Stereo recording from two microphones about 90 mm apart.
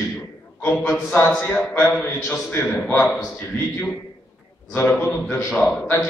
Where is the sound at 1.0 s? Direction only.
25° left (ahead or behind).